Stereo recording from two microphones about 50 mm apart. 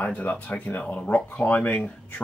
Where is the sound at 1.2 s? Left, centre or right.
Left.